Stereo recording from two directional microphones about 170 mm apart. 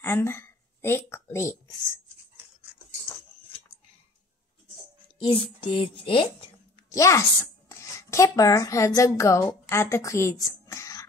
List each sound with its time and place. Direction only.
0.0 s speech: 15° left (ahead or behind)
5.2 s a sound: 30° left (ahead or behind)
6.9 s speech: 20° left (ahead or behind)